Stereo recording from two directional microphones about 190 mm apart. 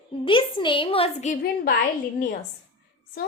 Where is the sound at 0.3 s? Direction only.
25° left (ahead or behind).